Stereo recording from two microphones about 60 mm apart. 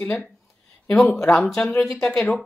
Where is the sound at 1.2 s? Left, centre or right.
Centre.